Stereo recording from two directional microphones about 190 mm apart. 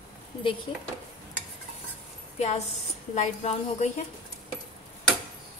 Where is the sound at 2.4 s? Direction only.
35° left (ahead or behind).